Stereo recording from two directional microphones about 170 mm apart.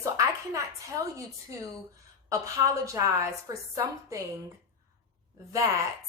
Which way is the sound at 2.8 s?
20° right (ahead or behind).